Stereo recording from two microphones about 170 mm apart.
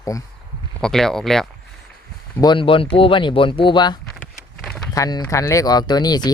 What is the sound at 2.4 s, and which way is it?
Speech, 30° left (ahead or behind).